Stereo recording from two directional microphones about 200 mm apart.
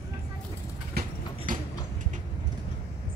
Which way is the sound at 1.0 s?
50° right (ahead or behind).